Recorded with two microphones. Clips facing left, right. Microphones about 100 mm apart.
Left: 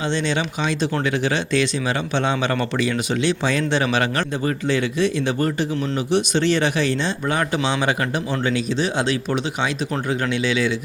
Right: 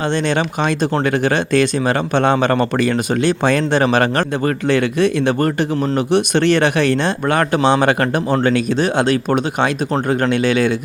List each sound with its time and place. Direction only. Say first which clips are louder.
0.1 s speech: right 5 dB; 55° right (ahead or behind)